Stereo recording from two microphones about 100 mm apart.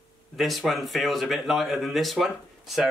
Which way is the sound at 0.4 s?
Centre (ahead or behind).